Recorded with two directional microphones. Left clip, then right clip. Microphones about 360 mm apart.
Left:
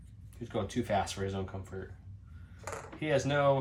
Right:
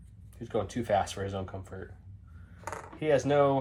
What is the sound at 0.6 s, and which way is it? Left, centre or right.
Speech, centre.